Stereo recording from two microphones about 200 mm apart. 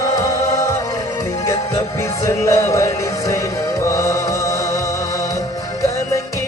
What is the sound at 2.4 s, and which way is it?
Music, 15° left (ahead or behind).